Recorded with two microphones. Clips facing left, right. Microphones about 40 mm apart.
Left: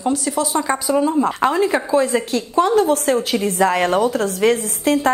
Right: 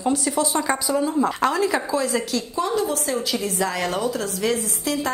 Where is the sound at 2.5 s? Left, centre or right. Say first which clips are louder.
Left 9 dB; left.